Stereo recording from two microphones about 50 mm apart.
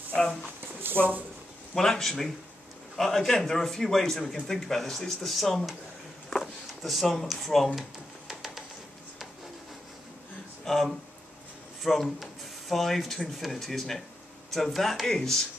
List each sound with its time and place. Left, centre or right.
0.8 s speech: right
1.8 s a man's voice: centre
6.8 s speech: centre
8.3 s a sound: centre
10.6 s speech: centre